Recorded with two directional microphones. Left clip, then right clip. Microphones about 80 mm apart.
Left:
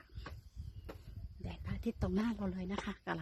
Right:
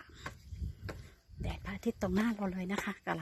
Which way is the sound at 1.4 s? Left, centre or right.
Right.